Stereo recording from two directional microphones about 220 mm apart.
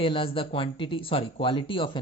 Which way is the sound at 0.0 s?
25° left (ahead or behind).